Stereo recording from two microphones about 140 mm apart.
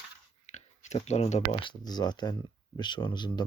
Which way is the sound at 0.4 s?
55° left (ahead or behind).